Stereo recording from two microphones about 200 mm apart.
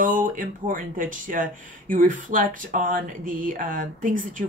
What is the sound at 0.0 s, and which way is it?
Speech, 40° right (ahead or behind).